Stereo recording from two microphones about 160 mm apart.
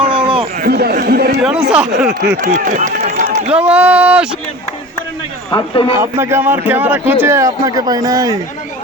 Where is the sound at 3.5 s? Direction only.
10° right (ahead or behind).